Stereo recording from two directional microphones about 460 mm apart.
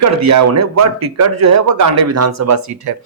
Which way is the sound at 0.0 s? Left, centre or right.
Right.